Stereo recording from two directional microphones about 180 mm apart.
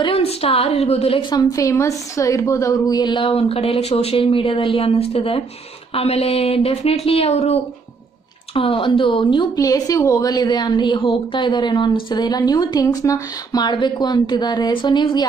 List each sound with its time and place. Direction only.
0.0 s speech: 30° left (ahead or behind)
1.3 s a woman's voice: 20° left (ahead or behind)